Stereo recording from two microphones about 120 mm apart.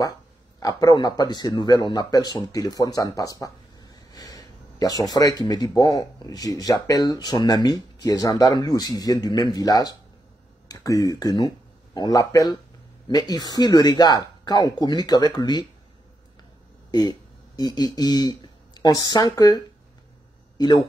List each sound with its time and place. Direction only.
0.6 s speech: 30° left (ahead or behind)
16.9 s speech: 35° left (ahead or behind)